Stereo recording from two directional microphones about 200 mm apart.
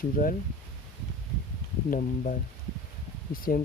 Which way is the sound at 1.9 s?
40° left (ahead or behind).